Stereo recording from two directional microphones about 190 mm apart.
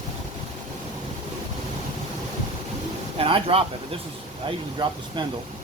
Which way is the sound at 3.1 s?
30° right (ahead or behind).